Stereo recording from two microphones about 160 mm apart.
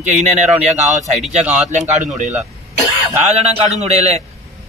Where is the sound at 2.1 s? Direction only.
45° right (ahead or behind).